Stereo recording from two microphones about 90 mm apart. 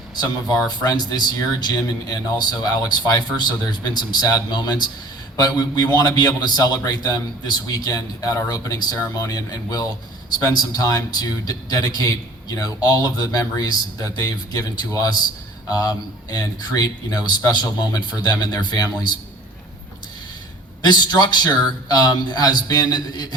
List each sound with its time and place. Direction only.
0.5 s a man's voice: 45° left (ahead or behind)
20.8 s a man's voice: 50° left (ahead or behind)